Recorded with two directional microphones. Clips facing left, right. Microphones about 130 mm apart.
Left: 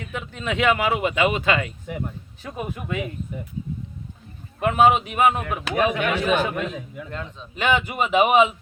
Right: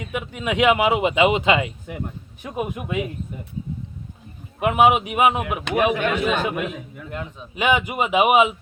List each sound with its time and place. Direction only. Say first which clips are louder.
0.0 s speech: right 3 dB; 15° right (ahead or behind)
4.6 s speech: right 1 dB; 15° right (ahead or behind)